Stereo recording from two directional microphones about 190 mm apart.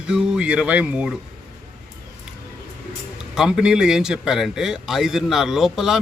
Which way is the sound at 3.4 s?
5° right (ahead or behind).